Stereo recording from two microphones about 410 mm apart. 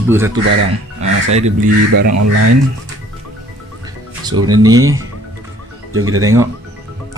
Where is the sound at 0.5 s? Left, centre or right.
Right.